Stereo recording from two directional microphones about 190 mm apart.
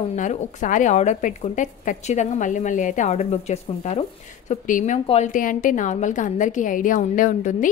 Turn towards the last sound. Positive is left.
turn(degrees=45)  # may be behind; listen again after turning